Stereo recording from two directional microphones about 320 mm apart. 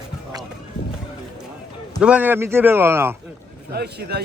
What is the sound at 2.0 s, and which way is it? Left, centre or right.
A man's voice, centre.